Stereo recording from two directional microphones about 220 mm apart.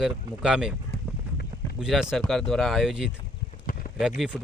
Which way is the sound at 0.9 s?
50° left (ahead or behind).